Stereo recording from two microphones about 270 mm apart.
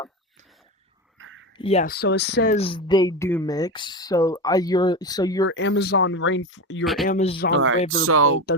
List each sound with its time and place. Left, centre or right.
1.2 s a sound: right
1.5 s speech: left
1.9 s speech: left
2.6 s speech: centre
5.5 s speech: left
6.8 s speech: centre
7.1 s speech: left
7.5 s speech: right